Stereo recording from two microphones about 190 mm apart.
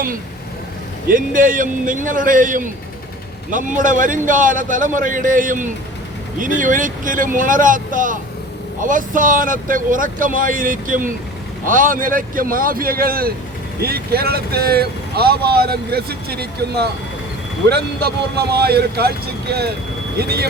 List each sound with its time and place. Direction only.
1.0 s speech: 45° right (ahead or behind)